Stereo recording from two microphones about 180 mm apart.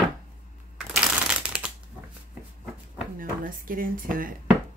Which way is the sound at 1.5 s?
5° right (ahead or behind).